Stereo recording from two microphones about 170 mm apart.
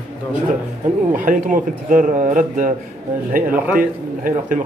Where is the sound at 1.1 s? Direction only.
50° right (ahead or behind).